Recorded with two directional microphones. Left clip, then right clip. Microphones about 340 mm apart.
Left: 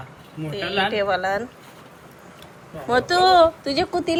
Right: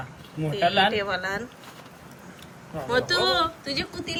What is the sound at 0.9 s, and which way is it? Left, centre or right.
Speech, centre.